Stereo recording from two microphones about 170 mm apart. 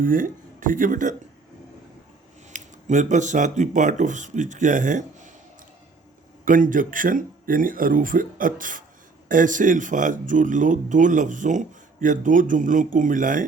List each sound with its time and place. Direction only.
0.0 s speech: 55° right (ahead or behind)
2.5 s speech: 45° right (ahead or behind)
6.4 s speech: 50° right (ahead or behind)